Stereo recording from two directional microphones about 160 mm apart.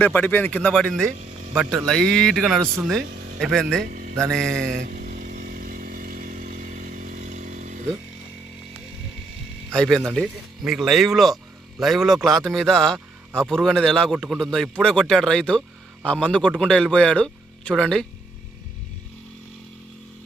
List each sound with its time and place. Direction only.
0.0 s speech: 10° left (ahead or behind)
1.2 s a sound: 45° right (ahead or behind)
1.9 s a man's voice: 5° left (ahead or behind)
3.8 s mantra: 60° right (ahead or behind)
4.2 s a man's voice: 5° left (ahead or behind)
4.8 s motorcycle: 65° right (ahead or behind); by 7.8 s 50° right (ahead or behind)
9.7 s a man's voice: 5° left (ahead or behind)